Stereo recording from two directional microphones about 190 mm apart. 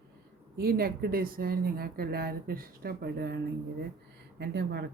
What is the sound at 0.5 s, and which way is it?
Speech, 50° right (ahead or behind).